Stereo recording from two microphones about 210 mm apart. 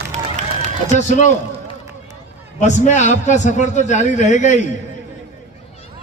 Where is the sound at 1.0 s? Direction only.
35° left (ahead or behind).